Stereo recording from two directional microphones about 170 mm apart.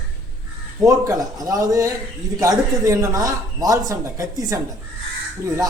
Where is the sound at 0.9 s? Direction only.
20° right (ahead or behind).